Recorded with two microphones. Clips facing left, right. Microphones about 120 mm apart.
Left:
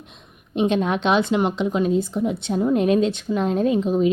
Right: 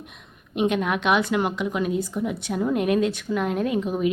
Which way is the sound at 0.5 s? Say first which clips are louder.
Left 3 dB; 25° left (ahead or behind).